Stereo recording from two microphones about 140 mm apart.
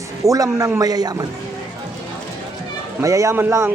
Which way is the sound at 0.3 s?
25° right (ahead or behind).